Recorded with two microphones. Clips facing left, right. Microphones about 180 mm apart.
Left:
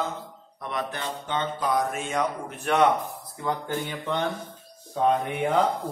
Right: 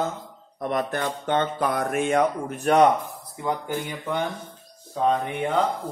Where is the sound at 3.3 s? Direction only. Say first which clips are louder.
Right 2 dB; 15° right (ahead or behind).